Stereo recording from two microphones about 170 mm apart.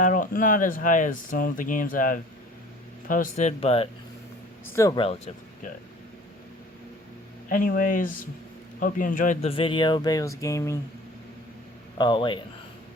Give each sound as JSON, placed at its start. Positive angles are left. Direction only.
{"t": 0.0, "sound": "speech", "side_deg": 50}
{"t": 4.6, "sound": "speech", "side_deg": 15}
{"t": 4.9, "sound": "speech", "side_deg": 35}
{"t": 7.5, "sound": "speech", "side_deg": 55}
{"t": 9.5, "sound": "speech", "side_deg": 30}
{"t": 11.9, "sound": "speech", "side_deg": 30}